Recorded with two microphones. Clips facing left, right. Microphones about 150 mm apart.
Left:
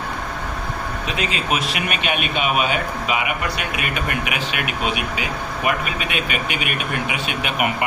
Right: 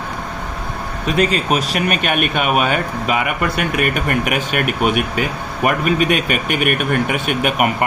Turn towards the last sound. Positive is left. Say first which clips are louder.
# right 5 dB
turn(degrees=-45)  # may be behind; listen again after turning